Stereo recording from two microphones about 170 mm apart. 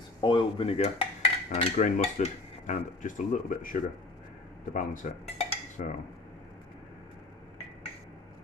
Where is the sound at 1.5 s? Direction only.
40° left (ahead or behind).